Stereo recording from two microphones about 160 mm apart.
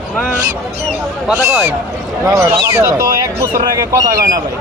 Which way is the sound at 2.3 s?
20° right (ahead or behind).